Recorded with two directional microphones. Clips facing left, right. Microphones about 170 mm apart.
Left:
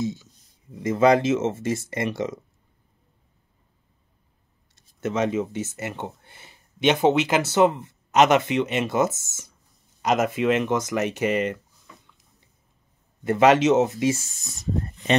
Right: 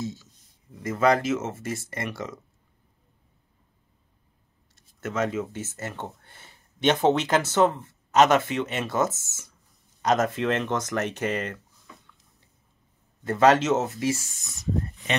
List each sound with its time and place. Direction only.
0.0 s speech: 15° left (ahead or behind)
5.0 s speech: 20° left (ahead or behind)
13.2 s speech: 15° left (ahead or behind)